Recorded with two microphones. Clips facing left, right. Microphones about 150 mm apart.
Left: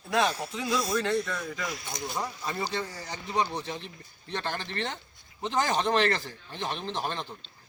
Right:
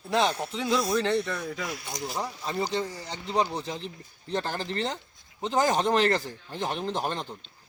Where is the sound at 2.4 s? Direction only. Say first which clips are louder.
Right 6 dB; 15° right (ahead or behind).